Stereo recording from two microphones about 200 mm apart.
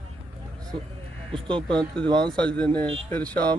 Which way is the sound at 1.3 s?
25° right (ahead or behind).